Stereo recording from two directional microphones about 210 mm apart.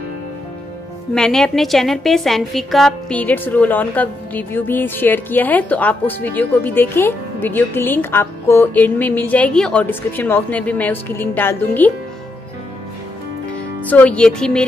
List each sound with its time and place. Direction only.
1.1 s a woman's voice: centre (ahead or behind)
13.8 s speech: 5° left (ahead or behind)